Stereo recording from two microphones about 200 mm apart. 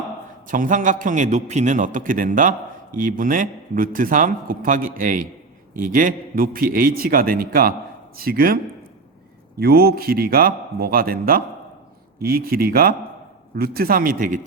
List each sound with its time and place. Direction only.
0.4 s a man's voice: 40° right (ahead or behind)
9.6 s a man's voice: 50° right (ahead or behind)